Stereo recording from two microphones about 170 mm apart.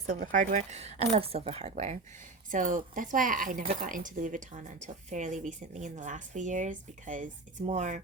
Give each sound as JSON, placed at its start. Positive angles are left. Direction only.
{"t": 0.1, "sound": "a woman's voice", "side_deg": -50}